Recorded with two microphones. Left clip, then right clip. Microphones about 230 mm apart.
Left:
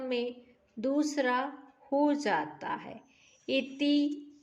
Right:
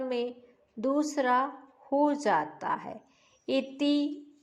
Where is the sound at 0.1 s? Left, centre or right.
Centre.